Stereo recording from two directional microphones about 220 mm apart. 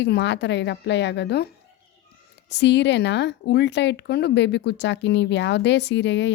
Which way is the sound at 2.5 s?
50° left (ahead or behind).